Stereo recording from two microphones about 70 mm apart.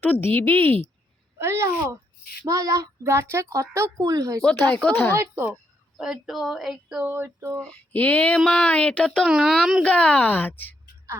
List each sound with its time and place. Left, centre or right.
0.0 s a woman's voice: left
1.4 s a child's voice: right
2.5 s child singing: right
3.1 s speech: right
4.9 s a woman's voice: left
5.1 s a child's voice: right
6.0 s speech: centre
7.0 s a child's voice: right
7.7 s a woman's voice: left
9.2 s speech: centre
9.8 s a woman's voice: centre